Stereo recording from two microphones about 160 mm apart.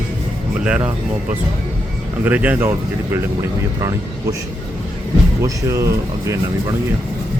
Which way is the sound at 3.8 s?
20° right (ahead or behind).